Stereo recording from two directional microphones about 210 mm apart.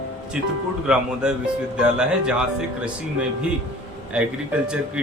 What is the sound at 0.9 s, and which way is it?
Speech, 5° right (ahead or behind).